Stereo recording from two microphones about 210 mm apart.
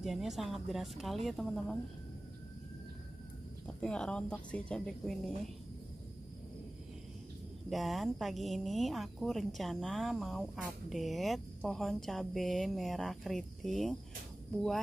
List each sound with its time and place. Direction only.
0.0 s speech: centre (ahead or behind)
3.8 s speech: 5° left (ahead or behind)
7.7 s speech: centre (ahead or behind)